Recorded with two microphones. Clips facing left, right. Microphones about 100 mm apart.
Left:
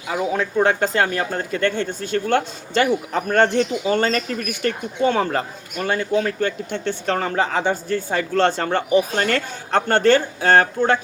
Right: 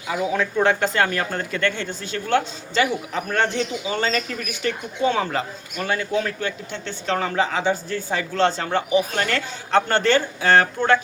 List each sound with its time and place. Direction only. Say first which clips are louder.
0.3 s a man's voice: left 1 dB; 30° left (ahead or behind)
6.7 s a man's voice: left 3 dB; 50° left (ahead or behind); by 10.9 s 35° left (ahead or behind)